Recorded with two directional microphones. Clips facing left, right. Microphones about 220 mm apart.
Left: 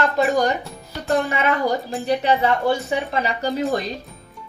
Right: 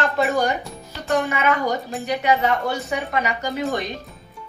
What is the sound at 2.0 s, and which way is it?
A woman's voice, 30° left (ahead or behind).